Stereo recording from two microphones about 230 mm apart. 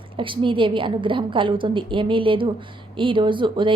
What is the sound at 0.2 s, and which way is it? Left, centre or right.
A woman's voice, right.